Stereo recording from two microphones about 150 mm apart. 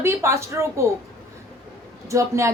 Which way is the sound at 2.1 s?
20° right (ahead or behind).